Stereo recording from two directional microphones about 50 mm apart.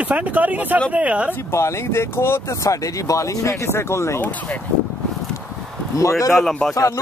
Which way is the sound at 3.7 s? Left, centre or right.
Left.